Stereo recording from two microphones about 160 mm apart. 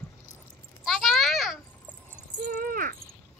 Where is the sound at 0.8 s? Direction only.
Centre (ahead or behind).